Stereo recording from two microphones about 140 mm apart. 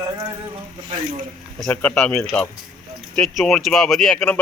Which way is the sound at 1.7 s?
10° left (ahead or behind).